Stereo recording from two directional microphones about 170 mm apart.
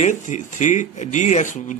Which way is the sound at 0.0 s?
45° left (ahead or behind).